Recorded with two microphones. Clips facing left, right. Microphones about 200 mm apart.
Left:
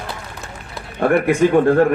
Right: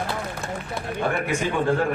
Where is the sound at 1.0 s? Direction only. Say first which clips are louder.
Left 10 dB; 60° left (ahead or behind).